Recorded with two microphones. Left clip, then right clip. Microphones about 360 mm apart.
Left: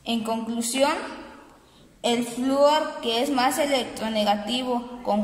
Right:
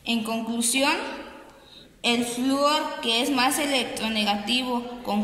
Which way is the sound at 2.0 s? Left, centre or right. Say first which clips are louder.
Even; left.